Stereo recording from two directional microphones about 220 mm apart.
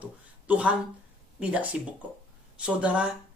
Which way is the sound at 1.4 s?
5° right (ahead or behind).